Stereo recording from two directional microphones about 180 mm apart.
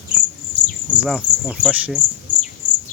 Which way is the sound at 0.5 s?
70° right (ahead or behind).